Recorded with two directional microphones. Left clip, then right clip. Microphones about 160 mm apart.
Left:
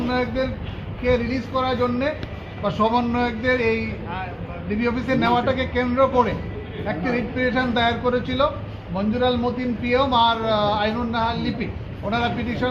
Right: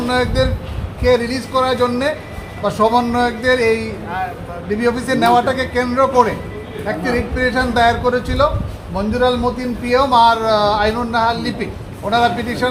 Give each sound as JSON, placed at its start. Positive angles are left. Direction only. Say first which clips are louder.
{"t": 0.1, "sound": "a man's voice", "louder": "right 8 dB", "side_deg": -15}